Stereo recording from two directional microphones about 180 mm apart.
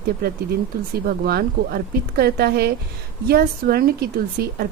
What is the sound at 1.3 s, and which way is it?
A woman's voice, 60° right (ahead or behind).